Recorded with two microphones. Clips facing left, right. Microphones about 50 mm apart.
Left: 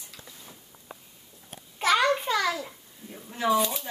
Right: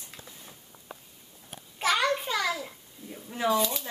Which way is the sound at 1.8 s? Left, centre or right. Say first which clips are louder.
Left 3 dB; centre.